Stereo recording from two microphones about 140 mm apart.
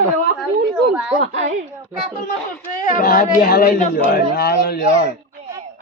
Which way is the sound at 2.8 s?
75° left (ahead or behind).